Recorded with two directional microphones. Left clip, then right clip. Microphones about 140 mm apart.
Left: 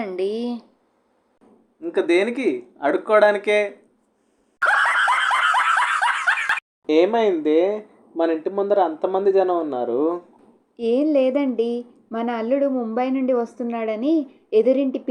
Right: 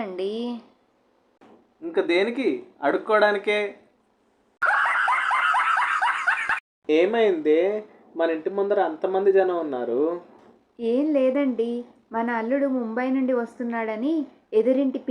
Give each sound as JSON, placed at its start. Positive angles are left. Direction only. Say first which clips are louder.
{"t": 0.0, "sound": "a sound", "louder": "left 4 dB", "side_deg": 20}
{"t": 1.8, "sound": "speech", "louder": "left 3 dB", "side_deg": 45}
{"t": 4.6, "sound": "laughter", "louder": "left 3 dB", "side_deg": 35}
{"t": 8.1, "sound": "a woman's voice", "louder": "left 3 dB", "side_deg": 40}